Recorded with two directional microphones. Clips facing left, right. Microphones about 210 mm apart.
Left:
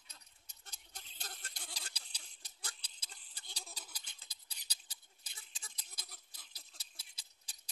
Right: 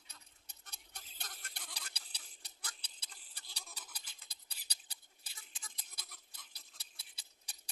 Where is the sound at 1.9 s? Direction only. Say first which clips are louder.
Right 1 dB; 60° right (ahead or behind).